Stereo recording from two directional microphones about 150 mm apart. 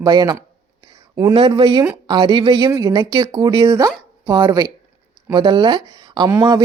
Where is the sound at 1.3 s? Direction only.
35° right (ahead or behind).